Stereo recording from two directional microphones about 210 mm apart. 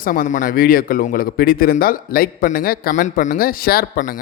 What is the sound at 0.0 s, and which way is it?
Speech, 40° left (ahead or behind).